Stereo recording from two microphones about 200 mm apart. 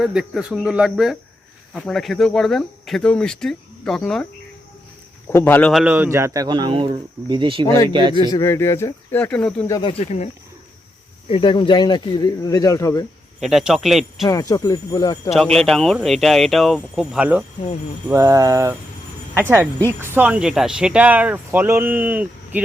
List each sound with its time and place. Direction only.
0.0 s speech: 5° right (ahead or behind)
5.3 s speech: 10° left (ahead or behind)
5.8 s speech: 10° right (ahead or behind)
8.1 s speech: 20° left (ahead or behind)
9.7 s speech: 25° left (ahead or behind)
11.3 s speech: 25° left (ahead or behind)
13.4 s speech: centre (ahead or behind)
14.3 s speech: 15° left (ahead or behind)
15.3 s speech: centre (ahead or behind)